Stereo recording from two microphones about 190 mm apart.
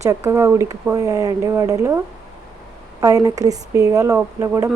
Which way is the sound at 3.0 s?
15° right (ahead or behind).